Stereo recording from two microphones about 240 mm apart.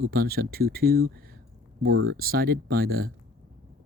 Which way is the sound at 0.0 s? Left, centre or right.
Right.